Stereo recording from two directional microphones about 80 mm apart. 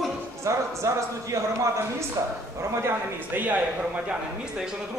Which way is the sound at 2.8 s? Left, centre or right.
Right.